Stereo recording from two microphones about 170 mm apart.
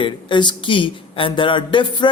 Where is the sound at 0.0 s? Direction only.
25° left (ahead or behind).